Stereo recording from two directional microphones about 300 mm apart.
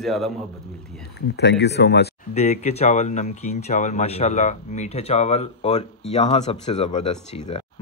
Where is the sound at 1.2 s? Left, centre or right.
Left.